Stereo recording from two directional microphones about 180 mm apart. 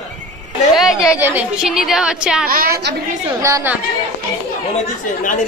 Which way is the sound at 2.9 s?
70° right (ahead or behind).